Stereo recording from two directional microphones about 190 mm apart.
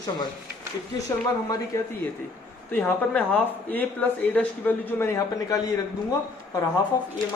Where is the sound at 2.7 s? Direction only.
10° left (ahead or behind).